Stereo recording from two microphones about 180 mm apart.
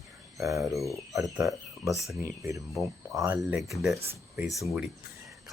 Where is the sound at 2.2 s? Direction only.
15° right (ahead or behind).